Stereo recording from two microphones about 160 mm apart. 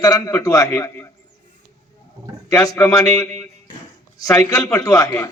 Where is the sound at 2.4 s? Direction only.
20° left (ahead or behind).